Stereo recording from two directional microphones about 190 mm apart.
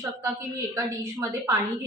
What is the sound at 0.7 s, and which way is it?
Speech, 15° right (ahead or behind).